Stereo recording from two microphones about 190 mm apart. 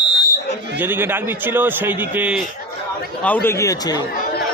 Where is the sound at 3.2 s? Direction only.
10° left (ahead or behind).